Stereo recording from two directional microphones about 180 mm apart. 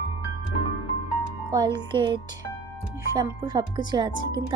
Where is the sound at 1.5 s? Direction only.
25° right (ahead or behind).